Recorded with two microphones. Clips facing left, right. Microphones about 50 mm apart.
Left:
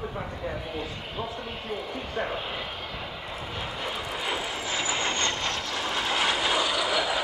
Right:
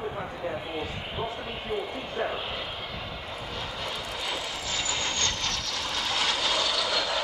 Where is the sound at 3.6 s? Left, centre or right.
Centre.